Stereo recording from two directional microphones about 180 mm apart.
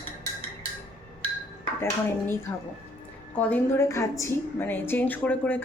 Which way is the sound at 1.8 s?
15° left (ahead or behind).